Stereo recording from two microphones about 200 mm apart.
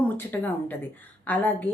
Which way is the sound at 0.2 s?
10° left (ahead or behind).